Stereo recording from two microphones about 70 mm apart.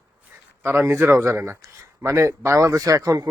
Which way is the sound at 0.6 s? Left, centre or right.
Right.